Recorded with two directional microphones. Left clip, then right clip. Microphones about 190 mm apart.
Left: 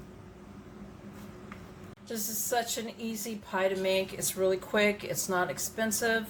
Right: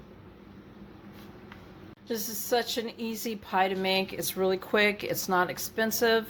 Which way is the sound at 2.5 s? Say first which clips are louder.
Right 4 dB; 45° right (ahead or behind).